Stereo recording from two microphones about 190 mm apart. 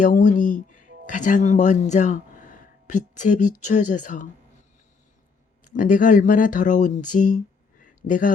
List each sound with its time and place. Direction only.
0.0 s speech: 45° left (ahead or behind)
5.7 s speech: 45° left (ahead or behind)
7.1 s a sound: 40° left (ahead or behind)